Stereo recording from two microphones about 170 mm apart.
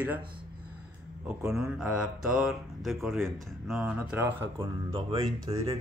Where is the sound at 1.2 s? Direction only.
5° right (ahead or behind).